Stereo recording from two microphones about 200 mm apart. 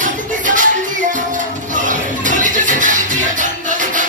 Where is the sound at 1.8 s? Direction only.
40° right (ahead or behind).